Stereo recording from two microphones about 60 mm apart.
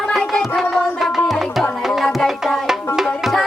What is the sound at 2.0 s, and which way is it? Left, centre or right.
Music, centre.